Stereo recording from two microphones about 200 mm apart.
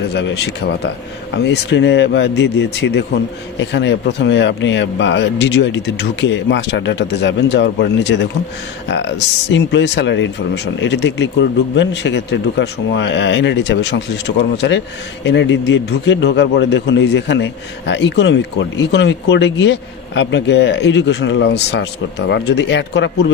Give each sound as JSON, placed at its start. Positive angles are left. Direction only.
{"t": 0.1, "sound": "a man's voice", "side_deg": 60}